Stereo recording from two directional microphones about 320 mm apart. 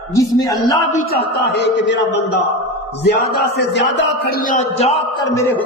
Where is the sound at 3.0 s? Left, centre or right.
Left.